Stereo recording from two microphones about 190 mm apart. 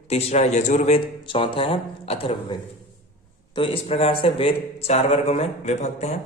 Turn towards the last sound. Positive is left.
turn(degrees=35)  # may be behind; listen again after turning